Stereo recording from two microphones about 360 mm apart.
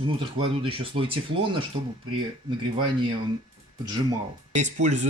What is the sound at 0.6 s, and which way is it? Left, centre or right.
Speech, centre.